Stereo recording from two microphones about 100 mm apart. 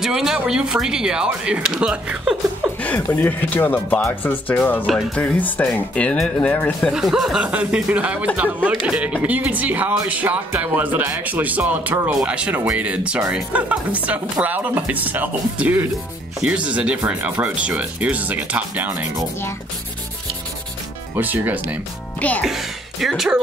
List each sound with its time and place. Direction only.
0.0 s speech: 5° right (ahead or behind)
2.8 s speech: 15° left (ahead or behind)
6.8 s speech: 5° right (ahead or behind)
21.2 s speech: 15° right (ahead or behind)
22.4 s speech: 5° right (ahead or behind)